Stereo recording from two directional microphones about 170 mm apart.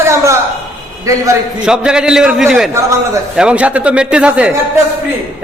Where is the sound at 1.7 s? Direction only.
5° right (ahead or behind).